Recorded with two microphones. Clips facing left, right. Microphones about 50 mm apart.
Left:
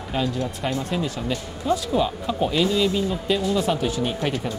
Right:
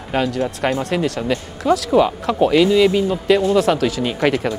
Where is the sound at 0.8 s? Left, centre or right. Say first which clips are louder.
Right 6 dB; right.